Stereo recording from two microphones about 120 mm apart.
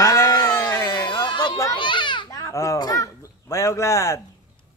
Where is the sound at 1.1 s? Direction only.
40° left (ahead or behind); by 4.2 s 25° left (ahead or behind).